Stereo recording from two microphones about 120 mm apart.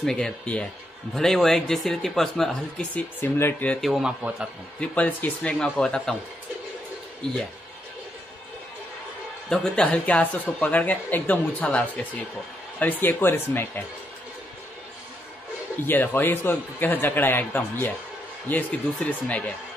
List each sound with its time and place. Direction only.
0.0 s a man's voice: 5° left (ahead or behind)
3.8 s speech: 5° right (ahead or behind)
4.7 s a man's voice: 10° left (ahead or behind)
9.5 s a man's voice: 10° left (ahead or behind)
15.9 s a man's voice: 15° left (ahead or behind)